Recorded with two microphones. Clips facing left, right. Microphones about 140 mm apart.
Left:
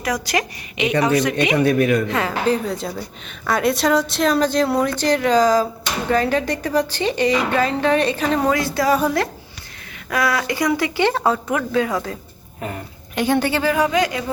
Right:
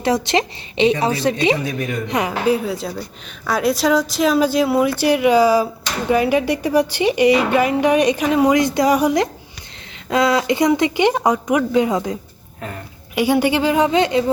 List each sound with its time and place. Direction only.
0.0 s speech: 25° right (ahead or behind)
1.5 s speech: 65° left (ahead or behind)
2.0 s a woman's voice: 15° right (ahead or behind)
2.6 s a woman's voice: centre (ahead or behind); by 12.1 s 20° right (ahead or behind)
13.1 s speech: 10° right (ahead or behind)